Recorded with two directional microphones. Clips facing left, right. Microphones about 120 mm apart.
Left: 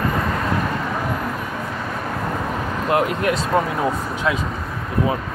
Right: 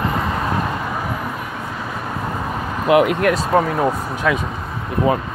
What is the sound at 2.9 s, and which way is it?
Speech, 90° right.